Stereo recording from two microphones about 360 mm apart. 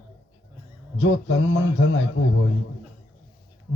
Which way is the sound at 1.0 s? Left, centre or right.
Left.